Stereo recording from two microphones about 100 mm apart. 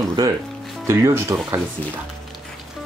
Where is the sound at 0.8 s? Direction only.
25° right (ahead or behind).